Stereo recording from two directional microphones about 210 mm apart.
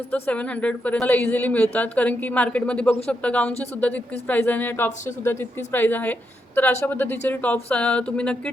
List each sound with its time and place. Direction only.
0.1 s a woman's voice: 5° left (ahead or behind)